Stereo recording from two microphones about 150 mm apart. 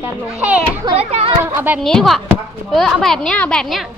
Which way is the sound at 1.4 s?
15° right (ahead or behind).